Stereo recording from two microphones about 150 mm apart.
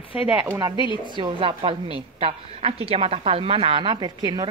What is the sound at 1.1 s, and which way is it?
A woman's voice, 35° right (ahead or behind).